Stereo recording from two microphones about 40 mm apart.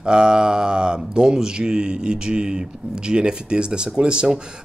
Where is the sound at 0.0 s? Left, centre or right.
Right.